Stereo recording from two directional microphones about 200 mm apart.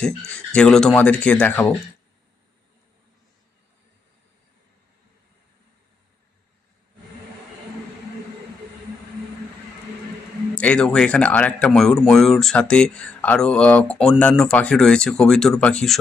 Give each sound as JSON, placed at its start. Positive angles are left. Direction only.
{"t": 0.3, "sound": "speech", "side_deg": 5}
{"t": 10.5, "sound": "speech", "side_deg": 5}